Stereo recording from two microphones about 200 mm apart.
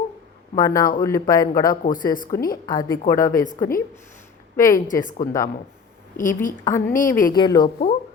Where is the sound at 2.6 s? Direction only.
20° left (ahead or behind).